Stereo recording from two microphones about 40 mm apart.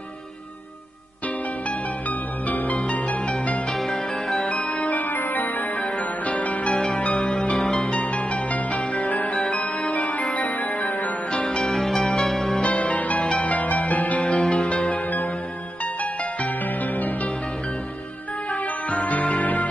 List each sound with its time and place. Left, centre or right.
2.0 s music: left
3.7 s music: centre
4.5 s music: left
4.8 s music: left
6.7 s music: centre
7.2 s music: left
7.5 s music: centre
8.5 s music: left
11.6 s music: centre
12.6 s music: left
14.2 s music: left
15.8 s music: left
18.5 s music: left